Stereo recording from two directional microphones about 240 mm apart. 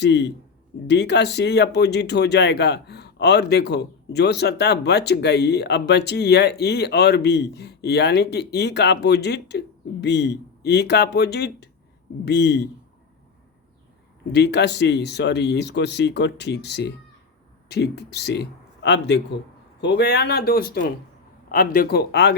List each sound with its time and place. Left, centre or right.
0.0 s speech: left
14.3 s a man's voice: left